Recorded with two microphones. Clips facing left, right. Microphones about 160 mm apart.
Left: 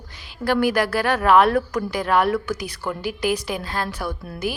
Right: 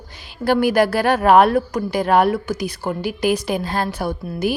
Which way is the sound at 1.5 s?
30° right (ahead or behind).